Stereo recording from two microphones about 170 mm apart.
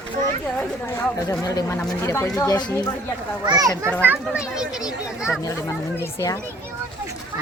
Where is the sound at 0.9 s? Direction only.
20° left (ahead or behind).